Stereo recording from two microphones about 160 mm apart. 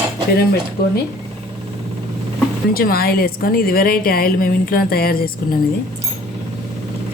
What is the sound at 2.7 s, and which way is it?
A woman's voice, 70° left (ahead or behind).